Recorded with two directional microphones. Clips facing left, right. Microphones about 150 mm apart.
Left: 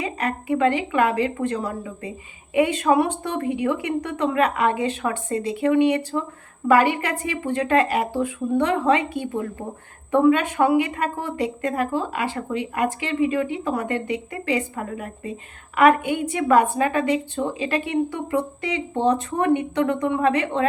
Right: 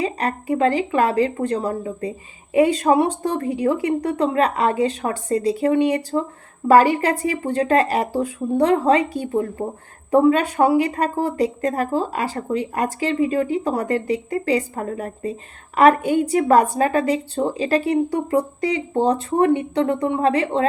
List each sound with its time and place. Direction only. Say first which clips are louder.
0.0 s speech: right 3 dB; 35° right (ahead or behind)